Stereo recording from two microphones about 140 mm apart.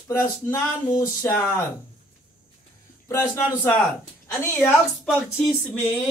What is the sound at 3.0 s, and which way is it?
Speech, 20° left (ahead or behind).